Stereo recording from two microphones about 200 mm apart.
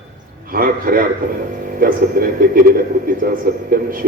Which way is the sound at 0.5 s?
45° right (ahead or behind).